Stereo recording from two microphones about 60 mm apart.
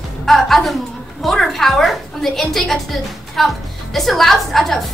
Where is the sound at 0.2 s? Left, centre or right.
Centre.